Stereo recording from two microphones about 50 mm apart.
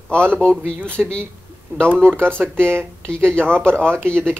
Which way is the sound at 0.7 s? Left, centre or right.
Right.